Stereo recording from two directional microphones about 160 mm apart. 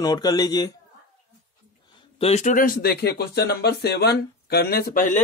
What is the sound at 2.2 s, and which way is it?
Speech, 45° left (ahead or behind).